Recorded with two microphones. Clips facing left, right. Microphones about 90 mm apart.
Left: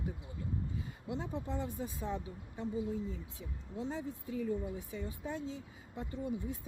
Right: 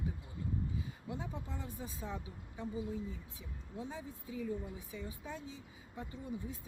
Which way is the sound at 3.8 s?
65° left (ahead or behind).